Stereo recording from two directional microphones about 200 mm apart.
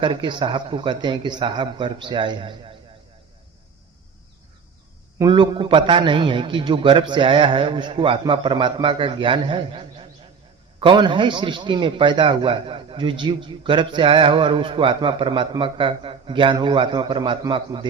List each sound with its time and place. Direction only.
0.0 s a man's voice: 25° right (ahead or behind)
5.2 s a man's voice: 25° right (ahead or behind)